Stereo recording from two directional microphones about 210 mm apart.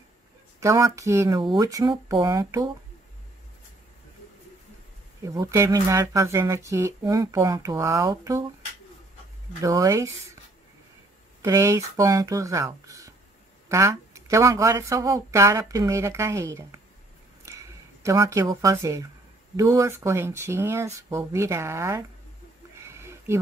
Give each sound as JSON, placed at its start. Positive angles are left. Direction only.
{"t": 0.6, "sound": "speech", "side_deg": -15}
{"t": 5.2, "sound": "speech", "side_deg": -15}
{"t": 9.6, "sound": "speech", "side_deg": -15}
{"t": 11.4, "sound": "speech", "side_deg": -15}
{"t": 22.8, "sound": "sniff", "side_deg": -15}